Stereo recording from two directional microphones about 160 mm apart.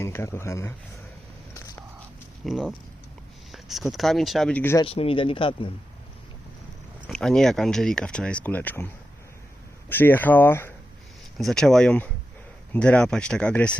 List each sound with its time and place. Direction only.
0.0 s speech: 15° left (ahead or behind)
1.5 s a sound: 20° left (ahead or behind)
2.5 s speech: centre (ahead or behind)
4.8 s speech: 35° left (ahead or behind)
7.1 s speech: 5° left (ahead or behind)
9.9 s speech: 10° left (ahead or behind)
11.3 s speech: centre (ahead or behind)